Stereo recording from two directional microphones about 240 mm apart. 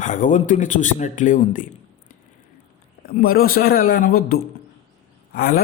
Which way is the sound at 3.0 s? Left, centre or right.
Left.